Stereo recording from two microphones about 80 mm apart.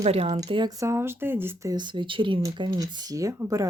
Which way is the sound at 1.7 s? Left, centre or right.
Right.